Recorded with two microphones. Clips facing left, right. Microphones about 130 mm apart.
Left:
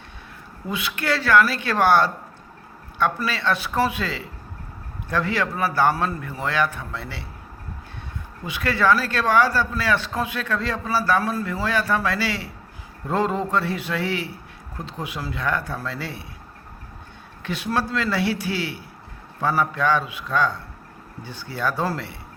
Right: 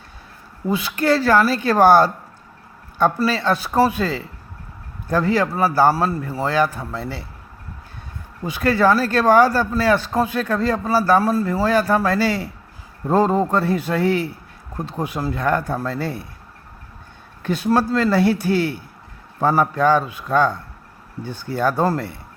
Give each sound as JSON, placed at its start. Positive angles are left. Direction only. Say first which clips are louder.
{"t": 0.7, "sound": "a man's voice", "louder": "right 7 dB", "side_deg": -35}
{"t": 8.4, "sound": "a man's voice", "louder": "right 4 dB", "side_deg": -40}
{"t": 17.4, "sound": "speech", "louder": "right 6 dB", "side_deg": -45}